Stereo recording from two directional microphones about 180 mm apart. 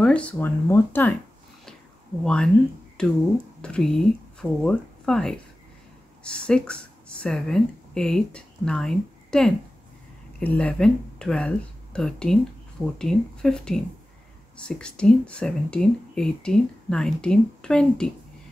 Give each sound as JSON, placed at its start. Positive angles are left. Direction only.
{"t": 0.0, "sound": "speech", "side_deg": 5}
{"t": 2.2, "sound": "a woman's voice", "side_deg": 5}